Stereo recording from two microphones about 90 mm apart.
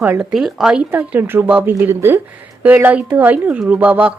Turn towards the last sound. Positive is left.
turn(degrees=-15)  # may be behind; listen again after turning